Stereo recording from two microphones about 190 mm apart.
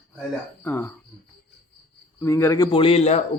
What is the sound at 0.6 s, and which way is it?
Speech, 10° left (ahead or behind).